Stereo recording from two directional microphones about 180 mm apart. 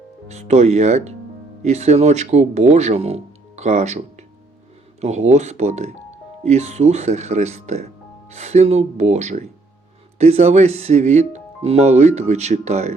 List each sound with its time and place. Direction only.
0.3 s speech: 40° right (ahead or behind)